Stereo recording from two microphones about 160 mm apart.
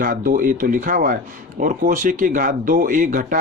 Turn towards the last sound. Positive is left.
turn(degrees=-55)  # may be behind; listen again after turning